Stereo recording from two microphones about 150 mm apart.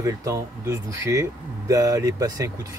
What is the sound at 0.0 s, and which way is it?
Speech, 20° right (ahead or behind).